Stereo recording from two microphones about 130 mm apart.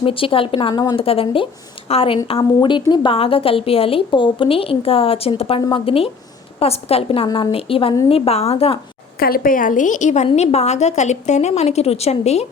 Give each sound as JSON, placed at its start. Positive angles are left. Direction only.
{"t": 0.0, "sound": "a woman's voice", "side_deg": 45}
{"t": 0.7, "sound": "a woman's voice", "side_deg": 30}
{"t": 0.9, "sound": "a woman's voice", "side_deg": 45}
{"t": 9.4, "sound": "a woman's voice", "side_deg": 90}
{"t": 10.3, "sound": "a woman's voice", "side_deg": 55}